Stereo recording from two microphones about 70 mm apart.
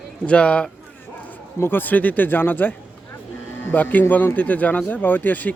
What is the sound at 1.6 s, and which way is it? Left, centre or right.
Speech, left.